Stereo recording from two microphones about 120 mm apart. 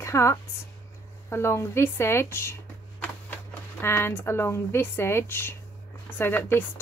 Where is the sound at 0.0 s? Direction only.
25° left (ahead or behind).